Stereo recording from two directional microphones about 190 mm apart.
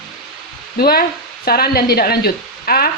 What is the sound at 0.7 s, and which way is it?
Speech, 55° left (ahead or behind).